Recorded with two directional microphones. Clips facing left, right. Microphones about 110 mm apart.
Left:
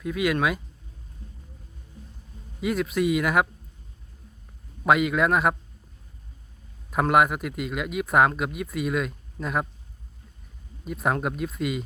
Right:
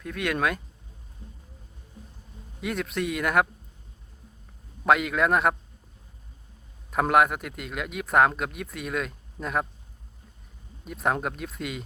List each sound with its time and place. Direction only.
0.0 s speech: 5° left (ahead or behind)
2.6 s speech: centre (ahead or behind)
4.8 s speech: centre (ahead or behind)
6.9 s speech: centre (ahead or behind)
10.8 s speech: centre (ahead or behind)